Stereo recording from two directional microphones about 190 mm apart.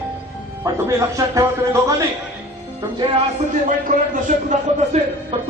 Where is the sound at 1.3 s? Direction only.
15° right (ahead or behind).